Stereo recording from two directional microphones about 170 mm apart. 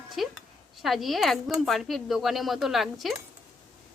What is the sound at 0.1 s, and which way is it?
A woman's voice, centre (ahead or behind).